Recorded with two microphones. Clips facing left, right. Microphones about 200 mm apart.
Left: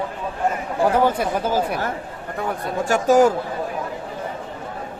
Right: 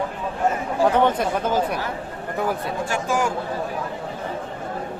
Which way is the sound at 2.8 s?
40° left (ahead or behind).